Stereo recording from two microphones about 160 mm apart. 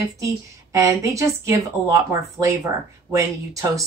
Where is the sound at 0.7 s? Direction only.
20° right (ahead or behind).